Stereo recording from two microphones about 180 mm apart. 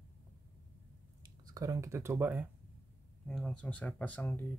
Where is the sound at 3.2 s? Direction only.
5° left (ahead or behind).